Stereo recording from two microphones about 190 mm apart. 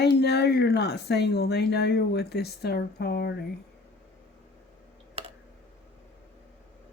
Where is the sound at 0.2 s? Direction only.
60° left (ahead or behind).